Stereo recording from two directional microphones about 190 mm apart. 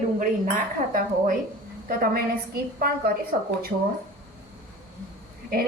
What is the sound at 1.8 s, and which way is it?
A woman's voice, 50° right (ahead or behind).